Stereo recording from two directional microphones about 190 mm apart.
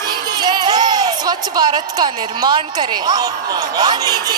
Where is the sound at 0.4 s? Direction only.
20° right (ahead or behind).